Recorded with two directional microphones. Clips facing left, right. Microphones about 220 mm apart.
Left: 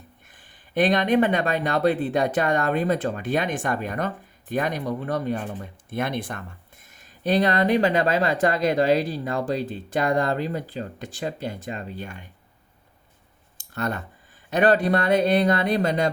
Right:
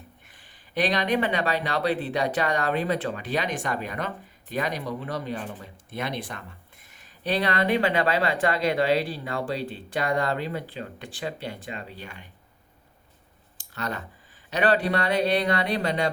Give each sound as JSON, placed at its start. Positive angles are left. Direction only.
{"t": 0.7, "sound": "speech", "side_deg": 50}
{"t": 13.7, "sound": "speech", "side_deg": 50}